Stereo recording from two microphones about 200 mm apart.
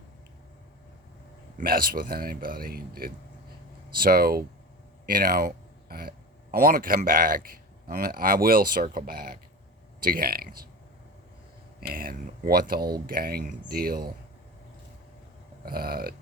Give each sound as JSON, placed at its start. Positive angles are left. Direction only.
{"t": 1.5, "sound": "speech", "side_deg": -45}
{"t": 11.8, "sound": "speech", "side_deg": -50}
{"t": 15.6, "sound": "speech", "side_deg": -50}